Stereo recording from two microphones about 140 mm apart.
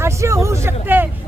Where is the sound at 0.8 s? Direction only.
15° right (ahead or behind).